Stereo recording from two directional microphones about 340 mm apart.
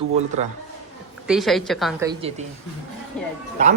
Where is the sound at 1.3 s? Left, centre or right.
Centre.